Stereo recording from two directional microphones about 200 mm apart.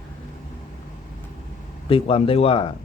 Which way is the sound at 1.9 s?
25° left (ahead or behind).